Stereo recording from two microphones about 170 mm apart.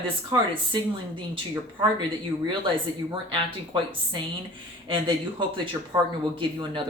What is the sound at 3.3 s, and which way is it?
A woman's voice, 30° right (ahead or behind).